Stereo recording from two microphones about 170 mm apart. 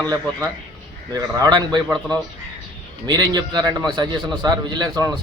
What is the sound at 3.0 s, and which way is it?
Speech, 25° right (ahead or behind).